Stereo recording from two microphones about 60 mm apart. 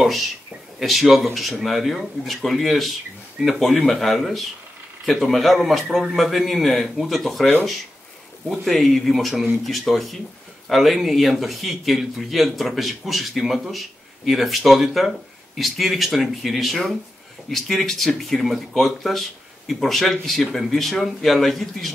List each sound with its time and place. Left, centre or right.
0.0 s a man's voice: centre
8.5 s a man's voice: centre